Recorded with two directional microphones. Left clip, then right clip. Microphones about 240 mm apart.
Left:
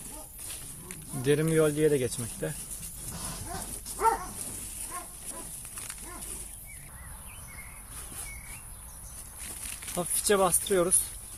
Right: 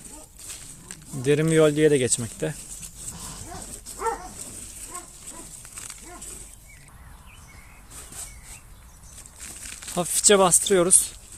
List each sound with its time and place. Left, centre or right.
1.2 s speech: right
4.0 s dog: left
9.9 s speech: right